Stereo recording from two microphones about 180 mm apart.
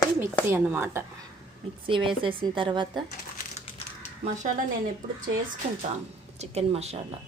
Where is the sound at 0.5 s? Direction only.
10° right (ahead or behind).